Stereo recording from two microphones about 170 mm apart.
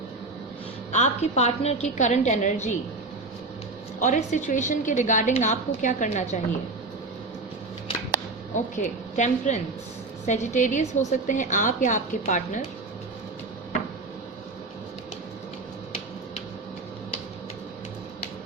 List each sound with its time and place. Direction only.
0.9 s a woman's voice: 40° left (ahead or behind)
4.0 s a woman's voice: 45° left (ahead or behind)
8.5 s a woman's voice: 45° left (ahead or behind)